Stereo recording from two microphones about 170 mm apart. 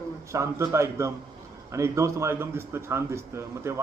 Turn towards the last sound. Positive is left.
turn(degrees=-15)  # may be behind; listen again after turning